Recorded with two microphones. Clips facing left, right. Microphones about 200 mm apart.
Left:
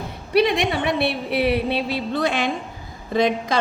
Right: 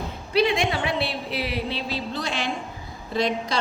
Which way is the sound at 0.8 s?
60° left (ahead or behind).